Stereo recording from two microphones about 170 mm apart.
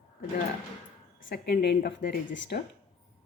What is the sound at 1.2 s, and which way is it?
Speech, 65° left (ahead or behind).